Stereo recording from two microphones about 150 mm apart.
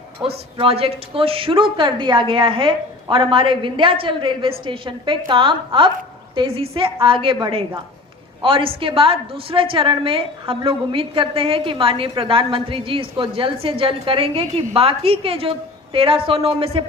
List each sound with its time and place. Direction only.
0.2 s a woman's voice: 35° right (ahead or behind)